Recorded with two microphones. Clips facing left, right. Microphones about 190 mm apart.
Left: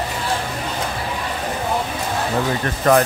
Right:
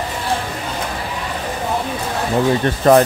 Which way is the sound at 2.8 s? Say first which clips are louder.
Right 4 dB; 30° right (ahead or behind).